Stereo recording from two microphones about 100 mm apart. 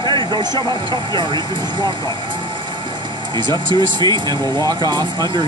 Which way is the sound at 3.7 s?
50° right (ahead or behind).